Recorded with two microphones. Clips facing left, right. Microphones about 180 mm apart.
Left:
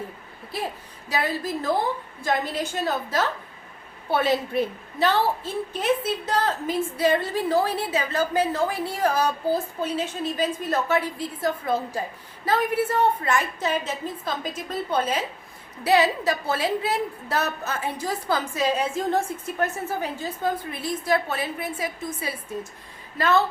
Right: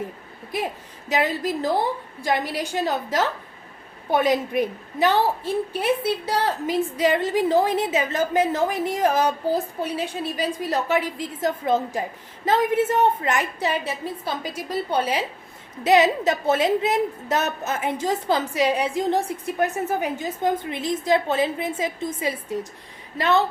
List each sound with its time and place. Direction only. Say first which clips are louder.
0.5 s a woman's voice: right 3 dB; 15° right (ahead or behind)